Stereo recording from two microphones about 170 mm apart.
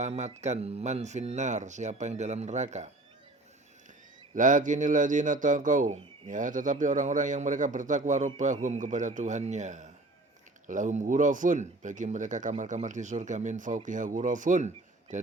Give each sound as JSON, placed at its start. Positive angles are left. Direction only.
{"t": 0.0, "sound": "speech", "side_deg": -40}
{"t": 4.4, "sound": "speech", "side_deg": -50}